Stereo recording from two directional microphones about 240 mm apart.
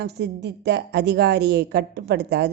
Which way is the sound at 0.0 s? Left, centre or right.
Right.